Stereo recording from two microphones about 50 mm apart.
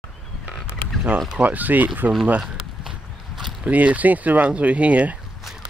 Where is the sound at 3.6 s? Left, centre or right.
Right.